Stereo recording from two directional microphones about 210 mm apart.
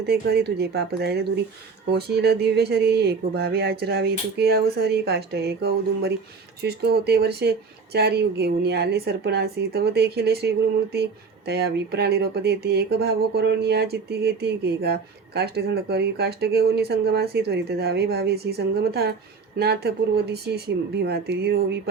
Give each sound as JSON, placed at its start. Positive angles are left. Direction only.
{"t": 0.1, "sound": "speech", "side_deg": -50}